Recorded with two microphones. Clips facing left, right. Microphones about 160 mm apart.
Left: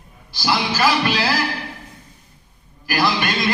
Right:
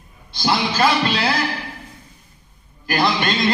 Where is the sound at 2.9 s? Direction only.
25° right (ahead or behind).